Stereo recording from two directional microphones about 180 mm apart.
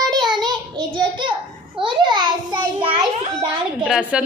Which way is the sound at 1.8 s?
25° right (ahead or behind).